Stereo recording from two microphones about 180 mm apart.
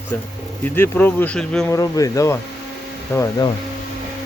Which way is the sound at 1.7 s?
20° left (ahead or behind).